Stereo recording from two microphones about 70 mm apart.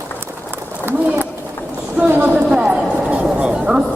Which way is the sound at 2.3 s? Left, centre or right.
Centre.